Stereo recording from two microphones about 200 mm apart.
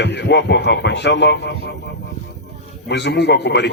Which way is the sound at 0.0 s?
60° left (ahead or behind).